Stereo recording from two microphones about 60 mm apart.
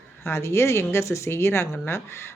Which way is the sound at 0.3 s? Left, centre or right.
Left.